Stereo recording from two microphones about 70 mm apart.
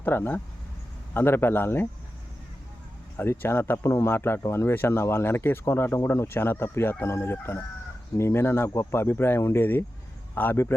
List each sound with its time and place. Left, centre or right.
0.0 s speech: left
3.2 s speech: left